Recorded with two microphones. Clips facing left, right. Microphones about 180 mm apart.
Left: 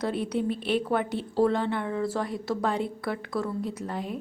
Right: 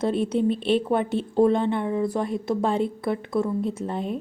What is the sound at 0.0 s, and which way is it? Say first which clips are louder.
Speech: right 5 dB; 25° right (ahead or behind).